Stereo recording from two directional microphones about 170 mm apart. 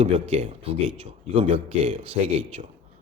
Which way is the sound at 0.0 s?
35° right (ahead or behind).